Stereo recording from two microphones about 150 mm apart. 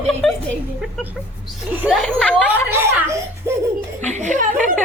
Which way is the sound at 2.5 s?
15° right (ahead or behind).